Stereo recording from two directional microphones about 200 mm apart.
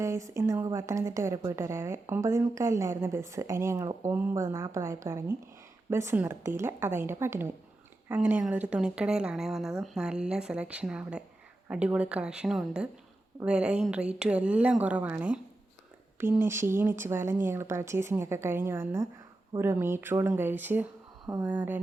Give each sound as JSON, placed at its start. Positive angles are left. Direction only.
{"t": 0.0, "sound": "a woman's voice", "side_deg": -15}